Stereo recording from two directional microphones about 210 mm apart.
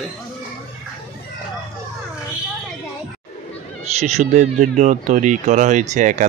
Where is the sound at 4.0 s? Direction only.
35° right (ahead or behind).